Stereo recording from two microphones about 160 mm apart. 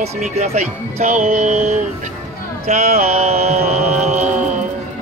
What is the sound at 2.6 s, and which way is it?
Mantra, 45° right (ahead or behind).